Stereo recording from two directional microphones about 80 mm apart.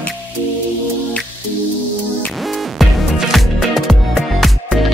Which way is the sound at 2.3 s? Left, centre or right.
Centre.